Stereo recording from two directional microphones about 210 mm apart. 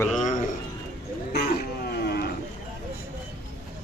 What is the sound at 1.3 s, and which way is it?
Roaring cats, 50° left (ahead or behind).